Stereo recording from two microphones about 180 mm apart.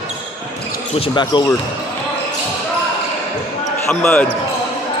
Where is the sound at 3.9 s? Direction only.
5° left (ahead or behind).